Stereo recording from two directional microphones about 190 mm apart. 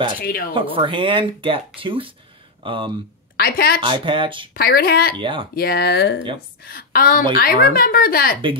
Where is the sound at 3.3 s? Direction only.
55° left (ahead or behind).